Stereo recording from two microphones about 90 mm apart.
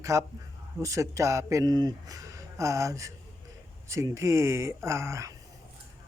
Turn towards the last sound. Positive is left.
turn(degrees=-30)  # may be behind; listen again after turning